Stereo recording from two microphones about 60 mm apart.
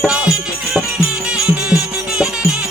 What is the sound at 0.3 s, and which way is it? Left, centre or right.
Music, centre.